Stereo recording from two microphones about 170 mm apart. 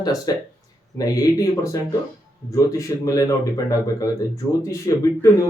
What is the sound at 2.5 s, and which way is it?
A man's voice, 20° left (ahead or behind).